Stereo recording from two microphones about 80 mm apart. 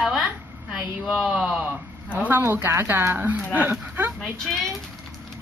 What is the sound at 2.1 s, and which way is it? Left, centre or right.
Speech, centre.